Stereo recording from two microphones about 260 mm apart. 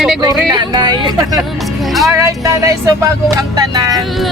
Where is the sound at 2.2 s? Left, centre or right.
Centre.